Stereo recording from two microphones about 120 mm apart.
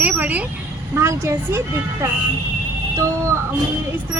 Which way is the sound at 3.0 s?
25° right (ahead or behind).